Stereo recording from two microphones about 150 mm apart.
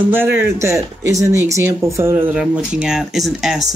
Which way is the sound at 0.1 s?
15° right (ahead or behind).